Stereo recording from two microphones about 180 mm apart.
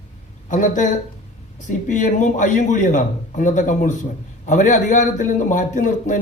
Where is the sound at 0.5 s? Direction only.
45° left (ahead or behind).